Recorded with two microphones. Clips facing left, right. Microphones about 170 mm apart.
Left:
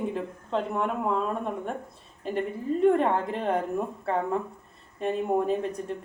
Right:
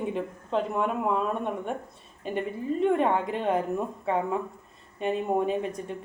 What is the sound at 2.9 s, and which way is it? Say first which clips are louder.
Speech: left 2 dB; 5° right (ahead or behind).